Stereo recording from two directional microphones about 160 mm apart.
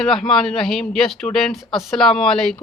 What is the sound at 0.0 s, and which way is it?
Speech, 5° left (ahead or behind).